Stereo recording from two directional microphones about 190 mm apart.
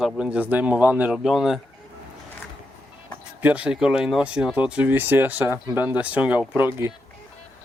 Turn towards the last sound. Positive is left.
turn(degrees=-10)  # may be behind; listen again after turning